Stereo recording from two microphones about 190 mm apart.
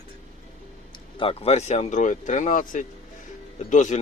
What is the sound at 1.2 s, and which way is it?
Speech, 30° left (ahead or behind).